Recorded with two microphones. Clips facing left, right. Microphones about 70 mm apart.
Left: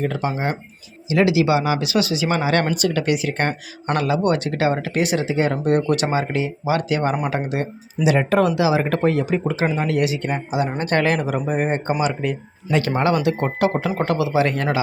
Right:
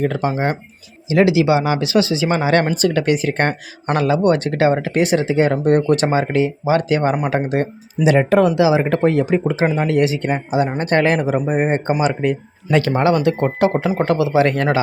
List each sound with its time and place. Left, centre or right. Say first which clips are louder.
0.0 s speech: right 4 dB; right
8.2 s speech: right 5 dB; right
11.9 s speech: right 4 dB; right